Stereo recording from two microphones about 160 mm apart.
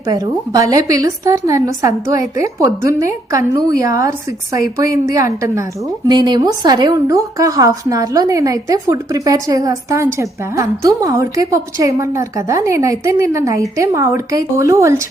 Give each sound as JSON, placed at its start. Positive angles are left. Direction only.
{"t": 0.0, "sound": "a woman's voice", "side_deg": -20}